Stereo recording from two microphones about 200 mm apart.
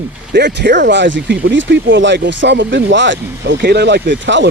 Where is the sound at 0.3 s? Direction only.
60° right (ahead or behind).